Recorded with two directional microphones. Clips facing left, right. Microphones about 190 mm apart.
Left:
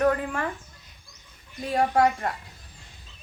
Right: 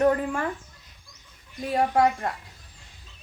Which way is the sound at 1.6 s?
5° right (ahead or behind).